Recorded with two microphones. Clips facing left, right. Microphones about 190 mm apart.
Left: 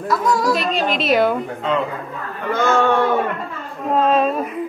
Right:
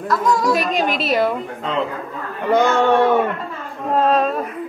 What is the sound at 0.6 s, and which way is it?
Speech, 10° right (ahead or behind).